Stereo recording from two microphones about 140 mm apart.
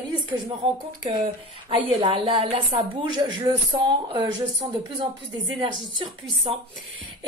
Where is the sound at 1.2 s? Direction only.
40° right (ahead or behind).